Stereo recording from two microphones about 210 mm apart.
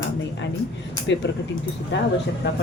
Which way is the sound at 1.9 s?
55° left (ahead or behind).